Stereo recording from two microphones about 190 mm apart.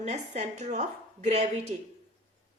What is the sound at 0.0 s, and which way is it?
A woman's voice, 35° right (ahead or behind).